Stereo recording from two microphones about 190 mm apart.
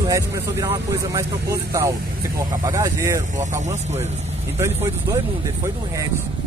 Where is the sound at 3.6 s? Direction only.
35° right (ahead or behind).